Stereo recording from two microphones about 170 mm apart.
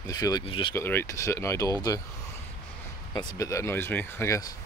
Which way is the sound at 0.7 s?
15° left (ahead or behind).